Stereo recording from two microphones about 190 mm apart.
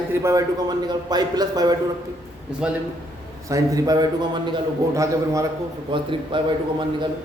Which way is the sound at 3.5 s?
15° right (ahead or behind).